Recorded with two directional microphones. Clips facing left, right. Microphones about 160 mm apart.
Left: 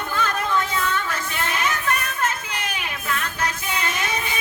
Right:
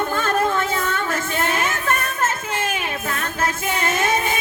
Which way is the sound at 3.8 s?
45° right (ahead or behind).